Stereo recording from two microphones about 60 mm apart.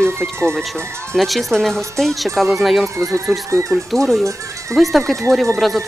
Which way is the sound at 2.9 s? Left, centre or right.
Right.